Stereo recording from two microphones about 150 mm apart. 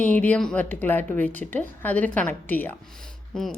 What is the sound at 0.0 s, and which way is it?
Speech, 10° left (ahead or behind).